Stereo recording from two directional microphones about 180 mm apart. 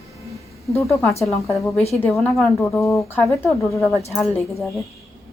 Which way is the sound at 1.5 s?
15° left (ahead or behind).